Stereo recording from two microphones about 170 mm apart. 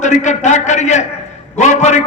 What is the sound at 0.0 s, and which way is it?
A man's voice, 45° left (ahead or behind).